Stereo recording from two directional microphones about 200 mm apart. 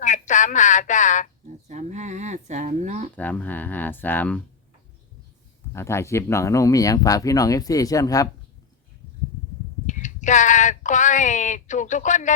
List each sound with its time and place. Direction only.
0.0 s a woman's voice: 40° left (ahead or behind)
1.6 s a sound: 35° right (ahead or behind)
3.2 s speech: 10° left (ahead or behind)
5.7 s speech: 15° left (ahead or behind)
9.8 s speech: 35° left (ahead or behind)